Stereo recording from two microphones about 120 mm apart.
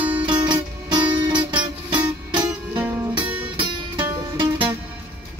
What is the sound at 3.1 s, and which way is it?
Music, 45° right (ahead or behind).